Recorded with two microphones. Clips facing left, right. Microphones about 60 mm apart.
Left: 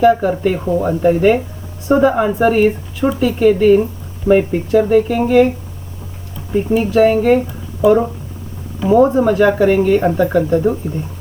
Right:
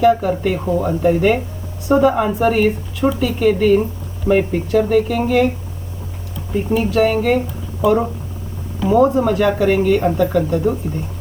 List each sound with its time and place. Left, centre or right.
0.0 s speech: centre
6.5 s speech: centre
10.2 s speech: left